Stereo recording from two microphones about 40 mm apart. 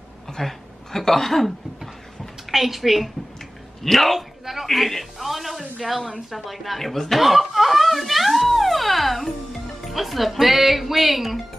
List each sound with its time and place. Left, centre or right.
0.3 s speech: centre
2.5 s a woman's voice: centre